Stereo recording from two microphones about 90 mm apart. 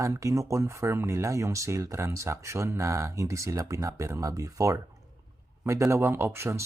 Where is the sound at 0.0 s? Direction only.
35° right (ahead or behind).